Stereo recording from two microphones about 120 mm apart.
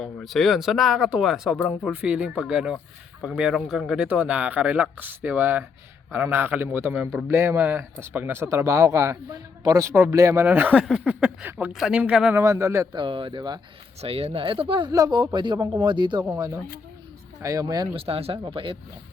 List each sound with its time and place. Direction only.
0.0 s a man's voice: centre (ahead or behind)
12.4 s a man's voice: 25° right (ahead or behind)
12.9 s speech: 45° right (ahead or behind)
14.0 s speech: 55° right (ahead or behind); by 15.5 s 40° right (ahead or behind)
15.5 s a man's voice: 30° right (ahead or behind)
15.8 s speech: 40° right (ahead or behind)
17.4 s speech: 30° right (ahead or behind)
17.9 s speech: 55° right (ahead or behind)